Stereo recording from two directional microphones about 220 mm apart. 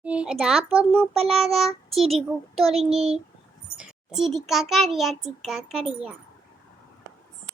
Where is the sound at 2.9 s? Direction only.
25° right (ahead or behind).